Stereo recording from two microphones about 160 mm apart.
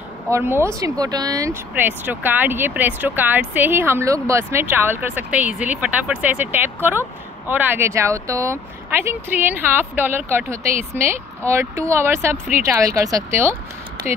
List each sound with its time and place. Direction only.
0.3 s speech: 15° right (ahead or behind)